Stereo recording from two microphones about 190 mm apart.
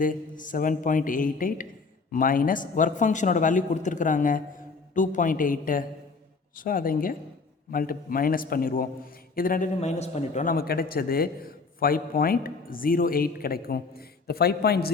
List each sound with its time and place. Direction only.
0.0 s a man's voice: 45° left (ahead or behind)